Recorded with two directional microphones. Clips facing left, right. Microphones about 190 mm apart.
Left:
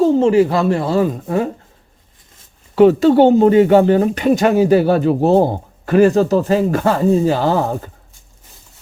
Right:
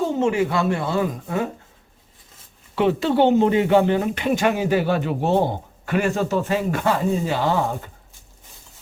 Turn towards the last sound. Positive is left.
turn(degrees=40)  # may be behind; listen again after turning